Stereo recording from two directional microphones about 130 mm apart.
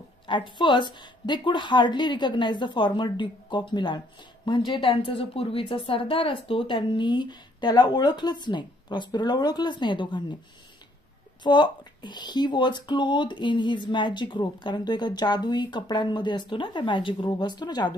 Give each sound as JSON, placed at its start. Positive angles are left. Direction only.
{"t": 0.3, "sound": "a woman's voice", "side_deg": 35}
{"t": 11.4, "sound": "a woman's voice", "side_deg": 35}